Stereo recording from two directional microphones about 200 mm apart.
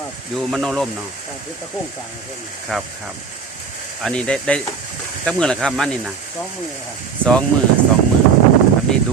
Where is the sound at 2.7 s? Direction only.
Centre (ahead or behind).